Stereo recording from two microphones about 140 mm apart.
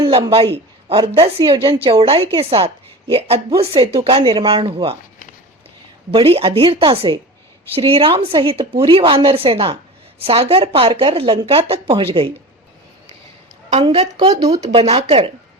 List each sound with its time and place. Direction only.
0.0 s a woman's voice: 40° right (ahead or behind)
6.1 s a woman's voice: 45° right (ahead or behind)
13.8 s speech: 45° right (ahead or behind)
14.3 s a woman's voice: 30° right (ahead or behind)
14.8 s speech: 50° right (ahead or behind)